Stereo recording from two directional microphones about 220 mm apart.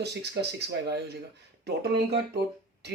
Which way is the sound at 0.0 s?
50° right (ahead or behind).